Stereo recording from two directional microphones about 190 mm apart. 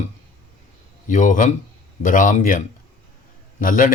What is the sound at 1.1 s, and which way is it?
Speech, 45° left (ahead or behind).